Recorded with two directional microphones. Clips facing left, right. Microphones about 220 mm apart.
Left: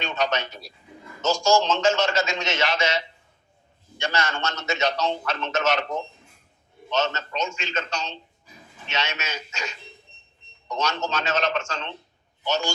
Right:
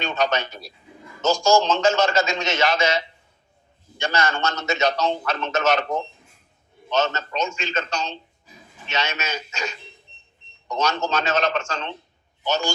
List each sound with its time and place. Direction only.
0.0 s speech: 40° right (ahead or behind)
6.9 s speech: 40° right (ahead or behind)
10.8 s speech: 40° right (ahead or behind)